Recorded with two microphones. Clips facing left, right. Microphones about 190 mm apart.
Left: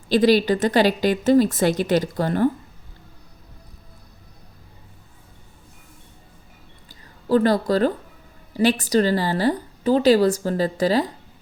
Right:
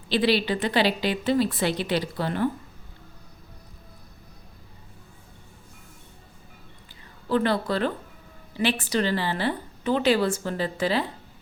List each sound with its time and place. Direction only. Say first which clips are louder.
0.1 s a woman's voice: left 6 dB; 45° left (ahead or behind)
7.3 s a woman's voice: left 6 dB; 40° left (ahead or behind)